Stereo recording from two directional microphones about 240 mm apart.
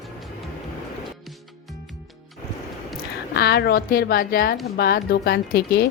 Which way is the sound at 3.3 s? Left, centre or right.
Left.